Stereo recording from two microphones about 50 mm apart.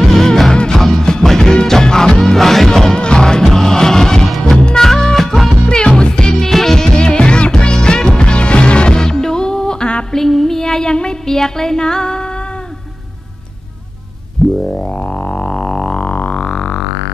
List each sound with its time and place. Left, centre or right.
0.0 s music: centre
5.7 s music: centre
10.1 s child singing: centre
14.7 s music: left